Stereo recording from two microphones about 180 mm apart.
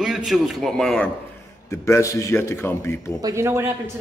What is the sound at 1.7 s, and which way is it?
A man's voice, 15° left (ahead or behind).